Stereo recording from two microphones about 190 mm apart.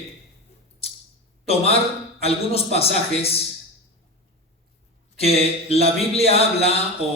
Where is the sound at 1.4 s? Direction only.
30° left (ahead or behind).